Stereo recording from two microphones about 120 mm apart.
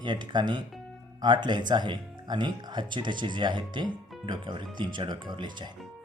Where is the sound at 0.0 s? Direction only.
40° right (ahead or behind).